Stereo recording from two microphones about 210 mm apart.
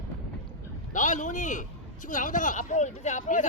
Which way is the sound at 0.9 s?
35° left (ahead or behind).